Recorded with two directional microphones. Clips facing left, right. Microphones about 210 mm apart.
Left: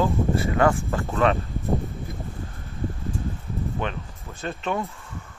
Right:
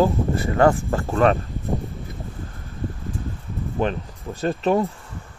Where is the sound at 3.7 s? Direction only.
35° right (ahead or behind).